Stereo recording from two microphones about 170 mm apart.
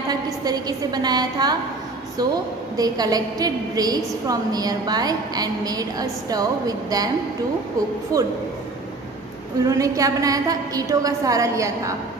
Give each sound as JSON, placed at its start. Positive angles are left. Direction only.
{"t": 0.1, "sound": "a woman's voice", "side_deg": -25}
{"t": 2.7, "sound": "a woman's voice", "side_deg": -20}
{"t": 8.1, "sound": "a woman's voice", "side_deg": -20}
{"t": 9.7, "sound": "a woman's voice", "side_deg": -20}